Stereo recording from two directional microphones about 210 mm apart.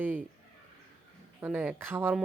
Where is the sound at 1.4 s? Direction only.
5° right (ahead or behind).